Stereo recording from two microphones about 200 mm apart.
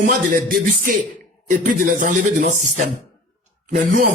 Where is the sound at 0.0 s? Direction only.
45° right (ahead or behind).